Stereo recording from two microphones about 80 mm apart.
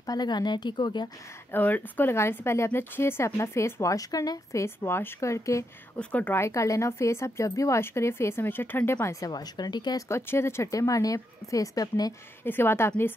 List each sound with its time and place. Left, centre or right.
0.0 s speech: left
1.5 s speech: left
2.1 s speech: left
4.7 s speech: left
5.9 s speech: centre
6.3 s speech: left
9.2 s speech: left
9.9 s a woman's voice: left
12.4 s speech: left